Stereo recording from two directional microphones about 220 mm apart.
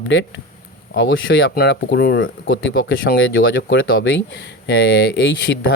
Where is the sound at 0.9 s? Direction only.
55° left (ahead or behind).